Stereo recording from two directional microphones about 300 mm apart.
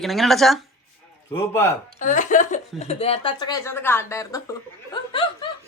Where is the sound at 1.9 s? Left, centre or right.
Left.